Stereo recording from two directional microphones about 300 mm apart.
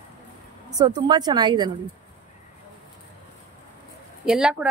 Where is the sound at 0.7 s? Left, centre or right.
Centre.